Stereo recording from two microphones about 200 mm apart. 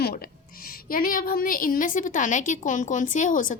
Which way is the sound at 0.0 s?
50° left (ahead or behind).